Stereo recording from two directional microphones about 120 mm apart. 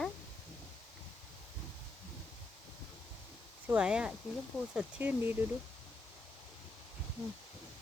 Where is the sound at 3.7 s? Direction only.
10° right (ahead or behind).